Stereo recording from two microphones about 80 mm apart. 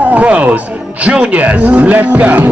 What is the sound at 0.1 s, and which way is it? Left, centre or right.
Music, centre.